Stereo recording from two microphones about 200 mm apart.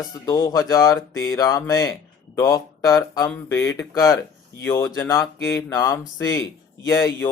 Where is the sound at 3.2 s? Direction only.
10° left (ahead or behind).